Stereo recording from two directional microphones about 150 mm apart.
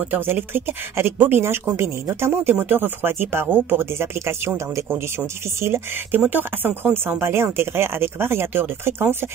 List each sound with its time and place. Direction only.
0.1 s a woman's voice: 15° right (ahead or behind)